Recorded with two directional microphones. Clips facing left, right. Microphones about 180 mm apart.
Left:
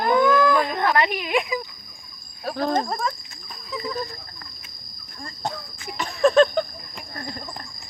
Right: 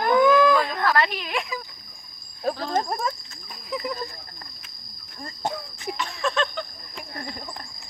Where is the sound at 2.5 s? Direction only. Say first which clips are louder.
Left 9 dB; 55° left (ahead or behind).